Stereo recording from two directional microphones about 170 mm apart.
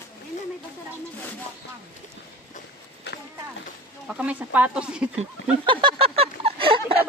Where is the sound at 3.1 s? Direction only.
90° left.